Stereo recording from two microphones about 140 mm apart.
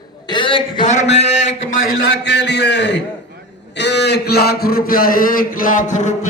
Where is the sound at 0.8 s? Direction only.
55° left (ahead or behind).